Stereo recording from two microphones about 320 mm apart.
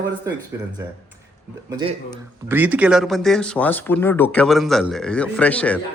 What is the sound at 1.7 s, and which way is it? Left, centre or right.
Speech, centre.